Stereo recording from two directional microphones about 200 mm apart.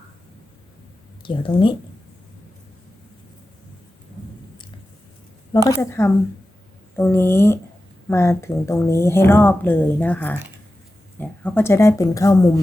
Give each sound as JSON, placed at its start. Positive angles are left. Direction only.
{"t": 1.2, "sound": "speech", "side_deg": 25}
{"t": 5.6, "sound": "a woman's voice", "side_deg": 15}